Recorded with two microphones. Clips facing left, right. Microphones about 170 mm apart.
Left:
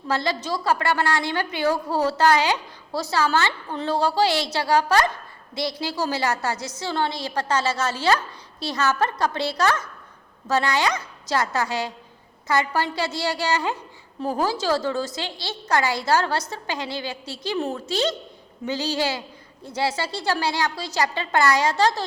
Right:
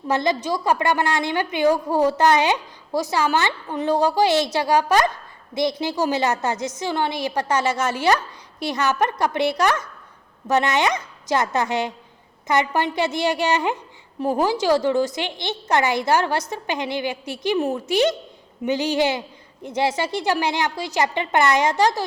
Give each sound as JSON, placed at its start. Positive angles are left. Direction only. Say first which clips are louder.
{"t": 0.1, "sound": "a woman's voice", "louder": "right 4 dB", "side_deg": -20}